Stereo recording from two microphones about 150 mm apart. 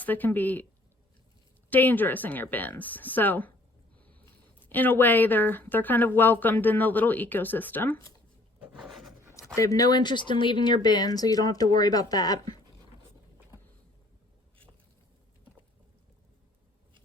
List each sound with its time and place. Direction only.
0.0 s speech: 10° left (ahead or behind)
1.7 s speech: 10° left (ahead or behind)
4.6 s speech: 10° left (ahead or behind)
8.5 s filing: 10° right (ahead or behind)
8.9 s a sound: centre (ahead or behind)
9.6 s speech: 20° left (ahead or behind)